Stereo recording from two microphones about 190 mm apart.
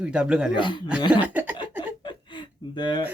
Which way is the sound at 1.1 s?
10° right (ahead or behind).